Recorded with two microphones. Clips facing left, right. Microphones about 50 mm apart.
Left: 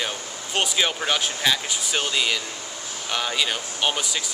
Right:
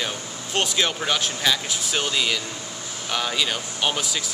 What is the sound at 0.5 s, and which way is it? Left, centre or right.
Speech, centre.